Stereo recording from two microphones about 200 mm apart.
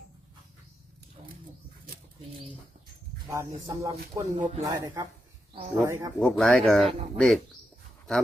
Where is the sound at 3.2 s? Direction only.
15° right (ahead or behind).